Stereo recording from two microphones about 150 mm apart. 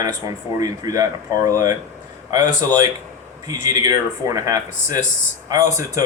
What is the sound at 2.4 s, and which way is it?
Speech, 55° left (ahead or behind).